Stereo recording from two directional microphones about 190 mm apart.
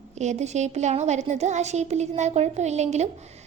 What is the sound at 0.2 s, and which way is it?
A woman's voice, 35° right (ahead or behind).